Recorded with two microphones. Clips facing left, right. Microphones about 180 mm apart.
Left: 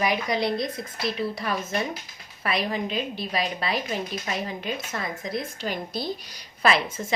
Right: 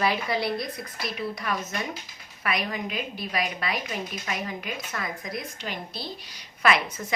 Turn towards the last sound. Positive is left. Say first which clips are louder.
# left 1 dB
turn(degrees=30)  # may be behind; listen again after turning